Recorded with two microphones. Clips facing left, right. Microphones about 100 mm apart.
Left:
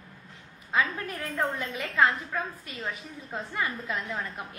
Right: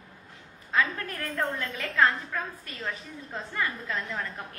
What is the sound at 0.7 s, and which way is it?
A woman's voice, 15° left (ahead or behind).